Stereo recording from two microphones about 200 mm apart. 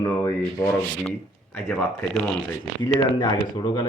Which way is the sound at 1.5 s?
10° left (ahead or behind).